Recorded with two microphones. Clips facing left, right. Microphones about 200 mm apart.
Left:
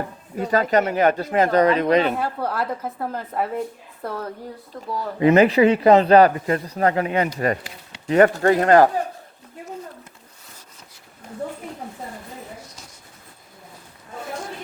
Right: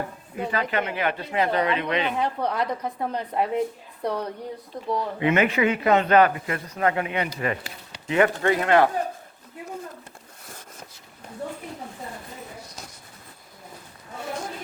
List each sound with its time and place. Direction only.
0.4 s speech: 40° left (ahead or behind)
2.1 s a woman's voice: 5° left (ahead or behind)
4.7 s speech: 20° right (ahead or behind)
5.2 s speech: 35° left (ahead or behind)